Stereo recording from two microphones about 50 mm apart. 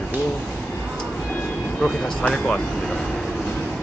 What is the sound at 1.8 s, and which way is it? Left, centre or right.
Speech, centre.